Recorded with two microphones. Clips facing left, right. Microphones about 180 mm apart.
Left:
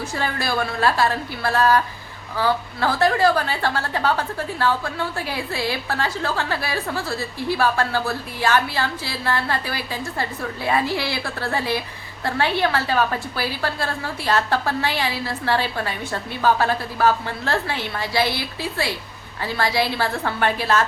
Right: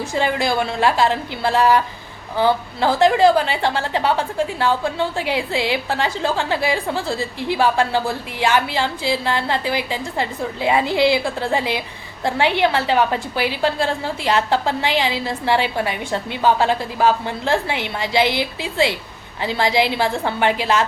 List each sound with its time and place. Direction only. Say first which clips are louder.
0.1 s a woman's voice: right 7 dB; 15° right (ahead or behind)